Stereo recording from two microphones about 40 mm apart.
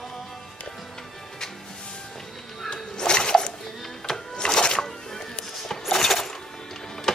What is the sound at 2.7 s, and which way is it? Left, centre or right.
Music, centre.